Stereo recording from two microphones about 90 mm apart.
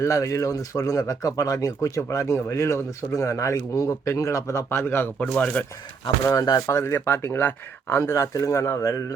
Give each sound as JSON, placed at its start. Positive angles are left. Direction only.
{"t": 0.0, "sound": "speech", "side_deg": 35}
{"t": 6.7, "sound": "speech", "side_deg": 30}
{"t": 8.1, "sound": "speech", "side_deg": 35}